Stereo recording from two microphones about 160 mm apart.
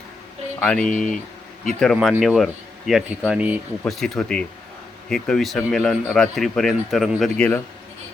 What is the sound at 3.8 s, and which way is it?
A man's voice, 5° left (ahead or behind).